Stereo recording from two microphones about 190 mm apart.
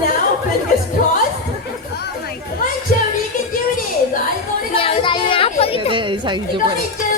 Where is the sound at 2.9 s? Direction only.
50° left (ahead or behind).